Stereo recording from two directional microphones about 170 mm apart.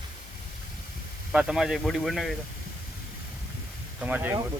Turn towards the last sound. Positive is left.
turn(degrees=-10)  # may be behind; listen again after turning